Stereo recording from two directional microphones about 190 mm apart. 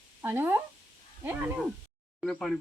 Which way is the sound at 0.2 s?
10° right (ahead or behind).